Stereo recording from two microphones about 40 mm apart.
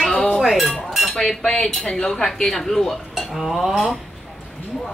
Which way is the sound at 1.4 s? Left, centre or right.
Left.